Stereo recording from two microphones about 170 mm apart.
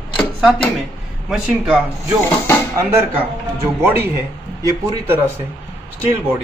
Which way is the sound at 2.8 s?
15° right (ahead or behind).